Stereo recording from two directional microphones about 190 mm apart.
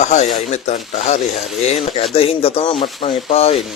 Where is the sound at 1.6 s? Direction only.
35° left (ahead or behind).